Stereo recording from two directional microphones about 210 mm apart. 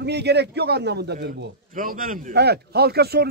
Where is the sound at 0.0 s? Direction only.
50° right (ahead or behind).